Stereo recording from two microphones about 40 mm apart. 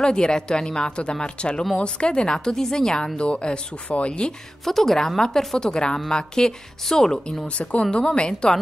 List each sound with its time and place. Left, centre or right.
0.0 s a woman's voice: centre
4.6 s a woman's voice: centre
5.6 s a woman's voice: left
7.4 s a woman's voice: left
8.3 s a woman's voice: centre